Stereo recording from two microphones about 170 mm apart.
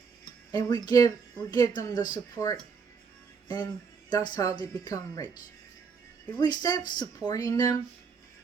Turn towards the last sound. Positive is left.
turn(degrees=20)  # may be behind; listen again after turning